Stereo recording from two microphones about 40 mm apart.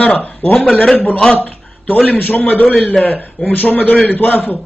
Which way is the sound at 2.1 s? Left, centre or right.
Left.